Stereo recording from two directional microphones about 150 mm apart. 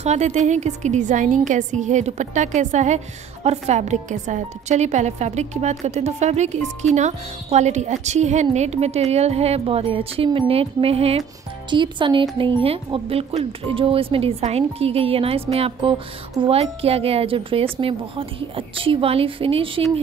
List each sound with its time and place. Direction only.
0.0 s a woman's voice: 50° right (ahead or behind)